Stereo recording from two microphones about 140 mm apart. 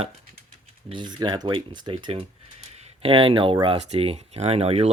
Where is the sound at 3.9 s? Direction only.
45° right (ahead or behind).